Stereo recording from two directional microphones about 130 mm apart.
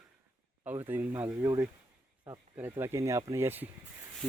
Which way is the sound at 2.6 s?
20° right (ahead or behind).